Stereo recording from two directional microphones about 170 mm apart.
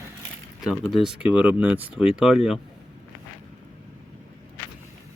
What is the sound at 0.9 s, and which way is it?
Speech, centre (ahead or behind).